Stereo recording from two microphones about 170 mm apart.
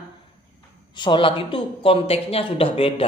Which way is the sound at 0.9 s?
30° left (ahead or behind).